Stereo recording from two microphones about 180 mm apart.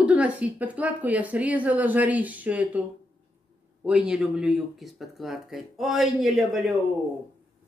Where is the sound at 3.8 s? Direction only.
5° right (ahead or behind).